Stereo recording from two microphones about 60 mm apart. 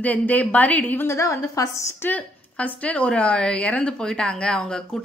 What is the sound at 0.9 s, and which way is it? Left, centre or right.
A woman's voice, left.